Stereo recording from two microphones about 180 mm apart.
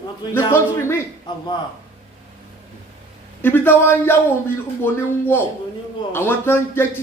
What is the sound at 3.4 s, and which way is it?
Speech, 10° left (ahead or behind).